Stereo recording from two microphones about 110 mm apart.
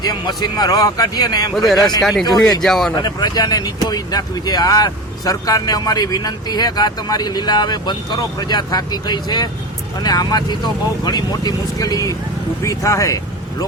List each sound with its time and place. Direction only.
0.0 s speech: 40° left (ahead or behind)
1.5 s speech: centre (ahead or behind)
1.8 s speech: 35° left (ahead or behind)
2.6 s speech: 5° left (ahead or behind)
2.9 s speech: 40° left (ahead or behind)